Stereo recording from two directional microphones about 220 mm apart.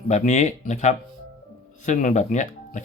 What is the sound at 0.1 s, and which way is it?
Speech, 35° left (ahead or behind).